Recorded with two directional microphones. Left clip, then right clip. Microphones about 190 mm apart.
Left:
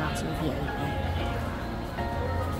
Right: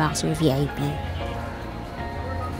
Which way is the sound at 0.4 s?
40° right (ahead or behind).